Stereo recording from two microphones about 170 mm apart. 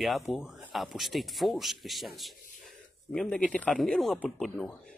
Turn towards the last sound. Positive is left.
turn(degrees=0)  # may be behind; listen again after turning